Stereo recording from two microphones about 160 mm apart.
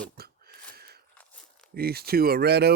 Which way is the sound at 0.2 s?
75° right (ahead or behind).